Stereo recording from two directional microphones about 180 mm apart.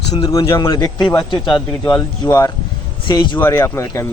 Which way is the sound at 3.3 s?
15° left (ahead or behind).